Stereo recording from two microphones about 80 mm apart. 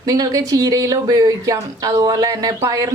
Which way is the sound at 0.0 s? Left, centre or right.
Right.